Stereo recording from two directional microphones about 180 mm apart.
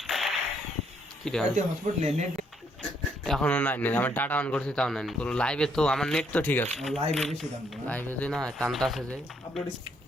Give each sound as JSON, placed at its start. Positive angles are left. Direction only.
{"t": 0.1, "sound": "a sound", "side_deg": 0}
{"t": 1.2, "sound": "speech", "side_deg": 5}
{"t": 1.5, "sound": "speech", "side_deg": -40}
{"t": 3.2, "sound": "a man's voice", "side_deg": 5}